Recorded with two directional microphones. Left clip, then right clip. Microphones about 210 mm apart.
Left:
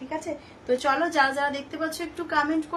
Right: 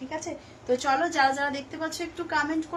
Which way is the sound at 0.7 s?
15° left (ahead or behind).